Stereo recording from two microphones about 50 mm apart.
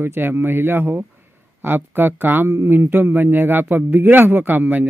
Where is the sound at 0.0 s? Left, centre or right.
Right.